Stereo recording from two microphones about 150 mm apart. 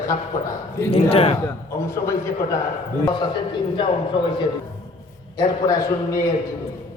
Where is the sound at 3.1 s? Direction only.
30° left (ahead or behind).